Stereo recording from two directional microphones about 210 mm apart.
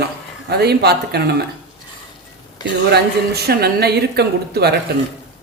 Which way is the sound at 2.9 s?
50° right (ahead or behind).